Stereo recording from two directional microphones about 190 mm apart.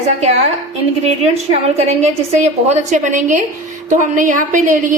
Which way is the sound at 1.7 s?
35° right (ahead or behind).